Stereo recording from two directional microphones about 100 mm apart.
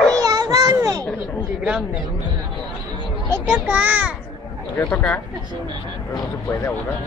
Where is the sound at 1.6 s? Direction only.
10° right (ahead or behind).